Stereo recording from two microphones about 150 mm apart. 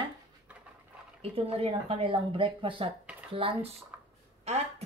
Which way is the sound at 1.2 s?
40° right (ahead or behind).